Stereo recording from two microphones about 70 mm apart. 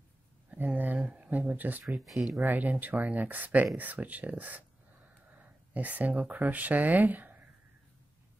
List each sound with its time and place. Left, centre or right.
0.5 s a sound: right
1.9 s speech: centre
2.4 s speech: right